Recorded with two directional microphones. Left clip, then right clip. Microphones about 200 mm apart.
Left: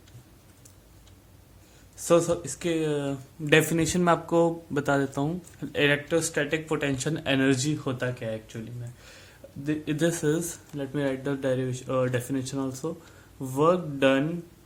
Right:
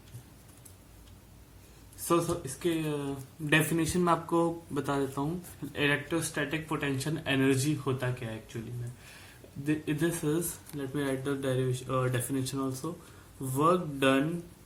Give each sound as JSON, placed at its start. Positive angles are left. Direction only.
{"t": 2.0, "sound": "speech", "side_deg": 45}
{"t": 9.6, "sound": "speech", "side_deg": 45}